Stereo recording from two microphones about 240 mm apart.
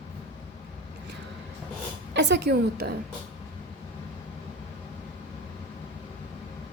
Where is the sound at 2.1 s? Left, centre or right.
Right.